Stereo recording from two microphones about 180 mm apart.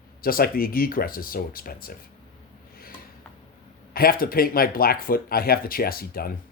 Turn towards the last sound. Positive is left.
turn(degrees=55)  # may be behind; listen again after turning